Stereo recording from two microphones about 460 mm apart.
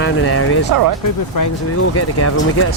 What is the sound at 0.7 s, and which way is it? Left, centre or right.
Speech, right.